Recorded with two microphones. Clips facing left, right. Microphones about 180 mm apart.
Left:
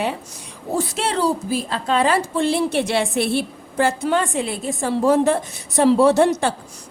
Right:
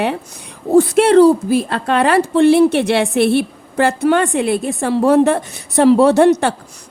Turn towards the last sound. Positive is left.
turn(degrees=-65)  # may be behind; listen again after turning